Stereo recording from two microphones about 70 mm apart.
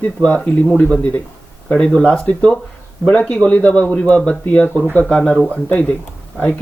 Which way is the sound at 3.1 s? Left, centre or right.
Centre.